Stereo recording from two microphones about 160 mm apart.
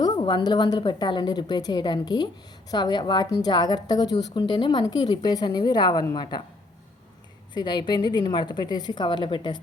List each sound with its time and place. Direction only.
0.0 s a woman's voice: 30° left (ahead or behind)
7.5 s a woman's voice: 25° left (ahead or behind)